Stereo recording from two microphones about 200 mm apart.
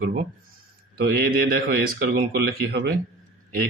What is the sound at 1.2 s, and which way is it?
Speech, 50° right (ahead or behind).